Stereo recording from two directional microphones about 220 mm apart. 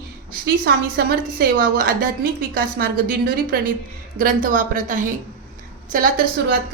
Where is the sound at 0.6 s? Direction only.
45° right (ahead or behind).